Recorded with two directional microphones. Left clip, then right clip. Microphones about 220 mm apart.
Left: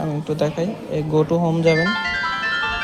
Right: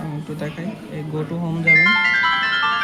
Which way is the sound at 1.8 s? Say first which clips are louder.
Right 6 dB; 20° right (ahead or behind).